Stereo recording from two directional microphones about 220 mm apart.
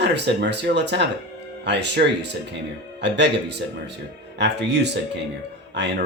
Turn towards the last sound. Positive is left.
turn(degrees=-50)  # may be behind; listen again after turning